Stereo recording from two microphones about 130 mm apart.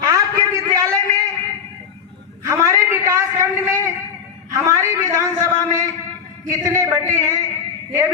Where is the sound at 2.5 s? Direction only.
20° right (ahead or behind).